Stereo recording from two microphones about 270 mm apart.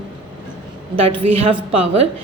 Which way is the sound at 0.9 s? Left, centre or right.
Right.